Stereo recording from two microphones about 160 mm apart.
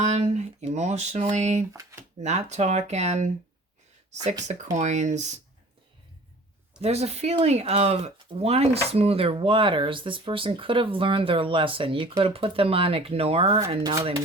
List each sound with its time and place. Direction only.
0.0 s speech: 45° right (ahead or behind)
1.7 s speech: 20° right (ahead or behind)
2.2 s speech: 45° right (ahead or behind)
6.8 s speech: 40° right (ahead or behind)